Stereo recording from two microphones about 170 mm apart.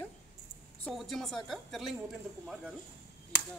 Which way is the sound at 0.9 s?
Centre (ahead or behind).